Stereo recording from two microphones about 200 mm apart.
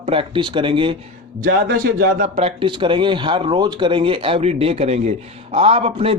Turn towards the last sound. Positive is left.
turn(degrees=-30)  # may be behind; listen again after turning